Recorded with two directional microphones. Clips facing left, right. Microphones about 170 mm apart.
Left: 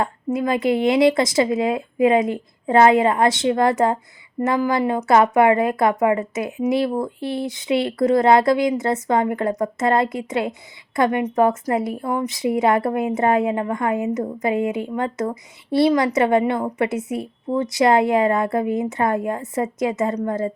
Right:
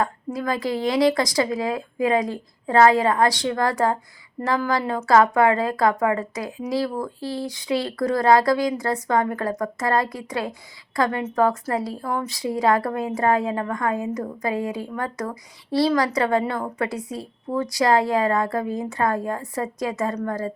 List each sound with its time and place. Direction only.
0.3 s a woman's voice: 20° left (ahead or behind)